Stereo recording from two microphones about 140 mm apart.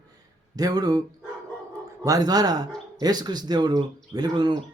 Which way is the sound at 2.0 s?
25° right (ahead or behind).